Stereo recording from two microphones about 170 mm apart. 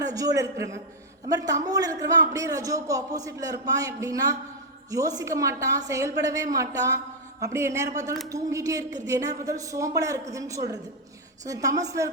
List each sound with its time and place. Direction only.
0.0 s a man's voice: 20° right (ahead or behind)